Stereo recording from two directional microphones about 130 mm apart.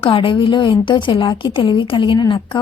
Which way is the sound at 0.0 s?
45° left (ahead or behind).